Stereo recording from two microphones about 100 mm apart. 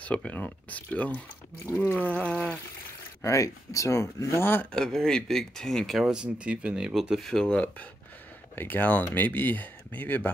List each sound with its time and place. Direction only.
0.0 s speech: 15° left (ahead or behind)
3.2 s speech: 30° left (ahead or behind)
4.7 s speech: 5° left (ahead or behind)